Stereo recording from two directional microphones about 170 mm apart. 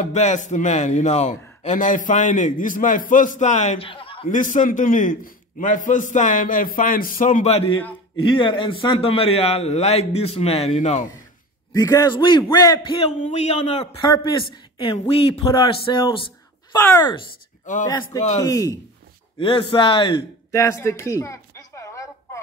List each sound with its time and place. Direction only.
0.0 s a man's voice: 45° left (ahead or behind)
4.3 s a man's voice: 50° left (ahead or behind)
11.7 s speech: 25° left (ahead or behind)
13.0 s a man's voice: 40° left (ahead or behind)
16.7 s speech: 20° left (ahead or behind)
17.7 s a man's voice: 50° left (ahead or behind)
18.4 s speech: 20° left (ahead or behind)
19.3 s speech: 30° left (ahead or behind)
20.5 s a sound: 15° left (ahead or behind)